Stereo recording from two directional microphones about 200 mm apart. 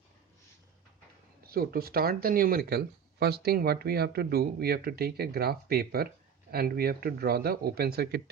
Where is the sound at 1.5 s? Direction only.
50° right (ahead or behind).